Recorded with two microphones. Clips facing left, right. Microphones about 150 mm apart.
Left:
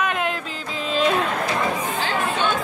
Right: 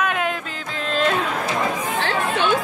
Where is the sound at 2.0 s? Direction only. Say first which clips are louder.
Right 1 dB; 75° right (ahead or behind).